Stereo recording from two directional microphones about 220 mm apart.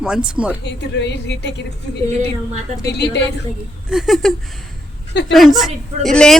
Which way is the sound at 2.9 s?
50° left (ahead or behind).